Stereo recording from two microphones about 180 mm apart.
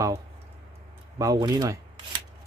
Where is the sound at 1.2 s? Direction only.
20° right (ahead or behind).